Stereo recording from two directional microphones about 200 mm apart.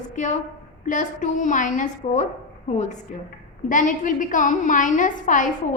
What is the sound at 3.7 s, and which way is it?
A woman's voice, 40° left (ahead or behind).